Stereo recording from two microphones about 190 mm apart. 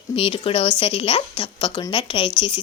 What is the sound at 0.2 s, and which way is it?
Speech, 30° left (ahead or behind).